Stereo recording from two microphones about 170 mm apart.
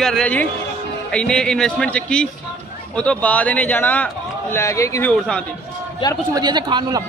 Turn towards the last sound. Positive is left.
turn(degrees=-25)  # may be behind; listen again after turning